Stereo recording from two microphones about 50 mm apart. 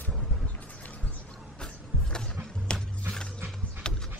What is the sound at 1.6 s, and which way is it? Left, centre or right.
Music, centre.